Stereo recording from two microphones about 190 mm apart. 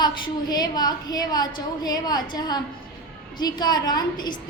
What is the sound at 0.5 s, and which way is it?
A woman's voice, 20° left (ahead or behind).